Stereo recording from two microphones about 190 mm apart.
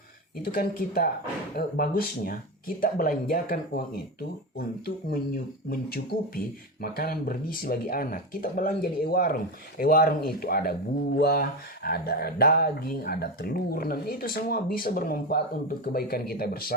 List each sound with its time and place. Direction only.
0.4 s speech: 50° left (ahead or behind)